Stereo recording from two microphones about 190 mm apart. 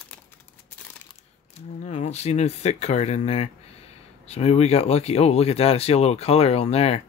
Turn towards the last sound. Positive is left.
turn(degrees=30)  # may be behind; listen again after turning